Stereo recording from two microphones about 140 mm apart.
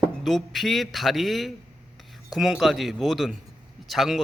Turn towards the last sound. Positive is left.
turn(degrees=0)  # may be behind; listen again after turning